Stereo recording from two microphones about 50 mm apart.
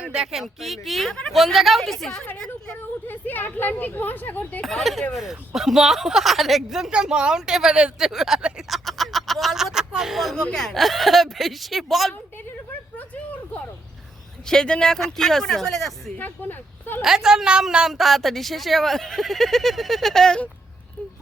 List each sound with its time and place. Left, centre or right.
0.0 s speech: centre
0.3 s speech: centre
3.1 s speech: left
4.6 s speech: centre
6.9 s a woman's voice: centre
8.7 s a sound: centre
10.3 s speech: centre
14.4 s speech: centre
16.1 s speech: left
17.0 s a woman's voice: centre
17.9 s speech: centre